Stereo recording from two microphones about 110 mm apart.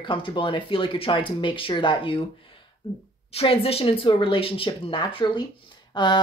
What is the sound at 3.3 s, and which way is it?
Speech, 55° left (ahead or behind).